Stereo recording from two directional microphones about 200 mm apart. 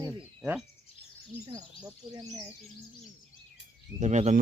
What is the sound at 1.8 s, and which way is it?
Speech, 20° right (ahead or behind).